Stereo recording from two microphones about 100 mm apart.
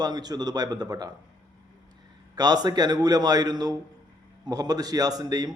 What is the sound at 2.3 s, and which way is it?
A man's voice, 40° right (ahead or behind).